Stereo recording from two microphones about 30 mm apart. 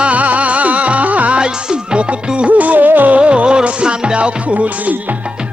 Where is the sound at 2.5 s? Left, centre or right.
Right.